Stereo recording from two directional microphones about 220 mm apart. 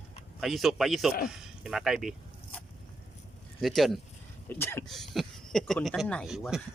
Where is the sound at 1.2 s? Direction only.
Centre (ahead or behind).